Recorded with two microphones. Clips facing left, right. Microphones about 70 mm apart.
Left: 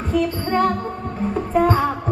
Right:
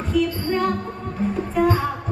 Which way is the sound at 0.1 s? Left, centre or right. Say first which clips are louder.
Left 1 dB; left.